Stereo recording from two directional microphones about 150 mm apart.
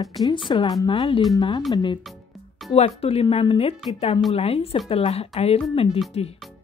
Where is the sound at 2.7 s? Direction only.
40° left (ahead or behind).